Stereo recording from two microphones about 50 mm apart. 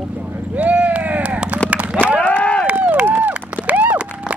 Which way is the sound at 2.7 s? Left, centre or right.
Right.